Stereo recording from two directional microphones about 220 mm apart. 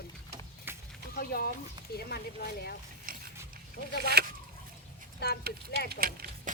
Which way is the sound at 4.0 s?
45° right (ahead or behind).